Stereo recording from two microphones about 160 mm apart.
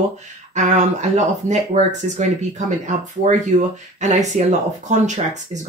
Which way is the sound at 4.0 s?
45° right (ahead or behind).